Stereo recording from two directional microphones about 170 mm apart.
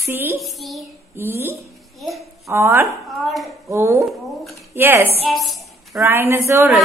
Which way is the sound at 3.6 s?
15° right (ahead or behind).